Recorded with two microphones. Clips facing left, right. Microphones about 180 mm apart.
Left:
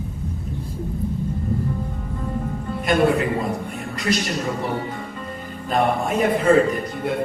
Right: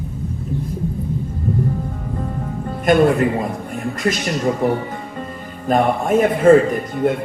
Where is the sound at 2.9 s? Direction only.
45° right (ahead or behind).